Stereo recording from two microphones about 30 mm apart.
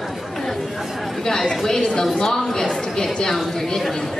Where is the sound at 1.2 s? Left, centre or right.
Centre.